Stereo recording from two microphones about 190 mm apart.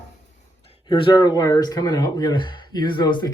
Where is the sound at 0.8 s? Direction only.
25° left (ahead or behind).